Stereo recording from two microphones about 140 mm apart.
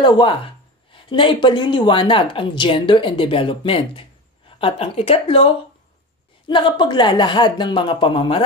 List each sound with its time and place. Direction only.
0.0 s a woman's voice: 35° left (ahead or behind)